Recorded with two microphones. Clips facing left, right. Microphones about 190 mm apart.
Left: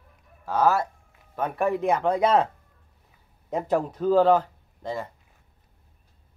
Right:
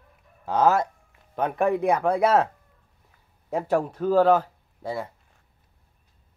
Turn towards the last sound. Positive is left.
turn(degrees=-10)  # may be behind; listen again after turning